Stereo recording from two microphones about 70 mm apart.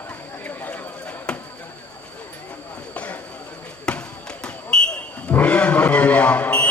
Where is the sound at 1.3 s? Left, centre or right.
Centre.